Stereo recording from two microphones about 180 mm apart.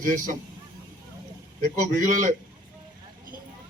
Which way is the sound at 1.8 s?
45° right (ahead or behind).